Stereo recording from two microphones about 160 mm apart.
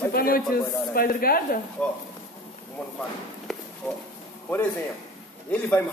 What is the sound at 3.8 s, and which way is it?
Speech, 5° left (ahead or behind).